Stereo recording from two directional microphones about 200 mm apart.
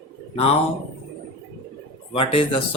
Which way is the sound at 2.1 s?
25° left (ahead or behind).